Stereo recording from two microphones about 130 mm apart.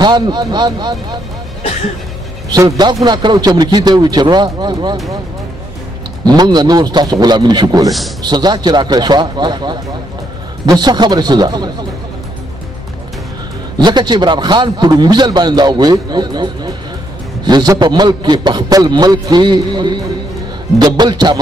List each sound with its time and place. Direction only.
0.0 s a man's voice: 35° right (ahead or behind)
2.5 s a man's voice: 30° right (ahead or behind)
6.2 s a man's voice: 30° right (ahead or behind)
13.7 s a man's voice: 35° right (ahead or behind)